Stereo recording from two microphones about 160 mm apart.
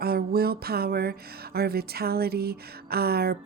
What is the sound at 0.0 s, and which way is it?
Speech, 75° right (ahead or behind).